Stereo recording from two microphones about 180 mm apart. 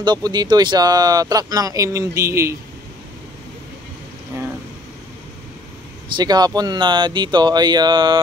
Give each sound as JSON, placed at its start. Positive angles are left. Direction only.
{"t": 0.0, "sound": "speech", "side_deg": -25}
{"t": 6.1, "sound": "speech", "side_deg": -20}